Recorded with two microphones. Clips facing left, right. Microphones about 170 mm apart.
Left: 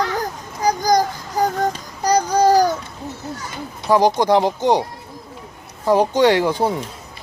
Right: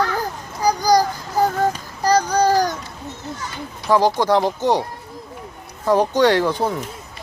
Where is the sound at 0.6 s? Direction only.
20° left (ahead or behind).